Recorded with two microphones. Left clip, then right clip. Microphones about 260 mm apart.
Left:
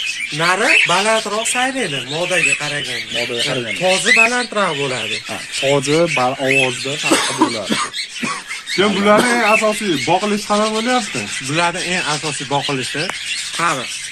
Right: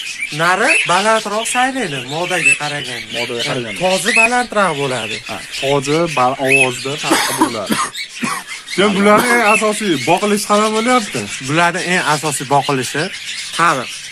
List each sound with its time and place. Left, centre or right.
0.4 s speech: centre
3.8 s speech: right
5.6 s speech: centre
7.2 s cough: right
8.7 s speech: right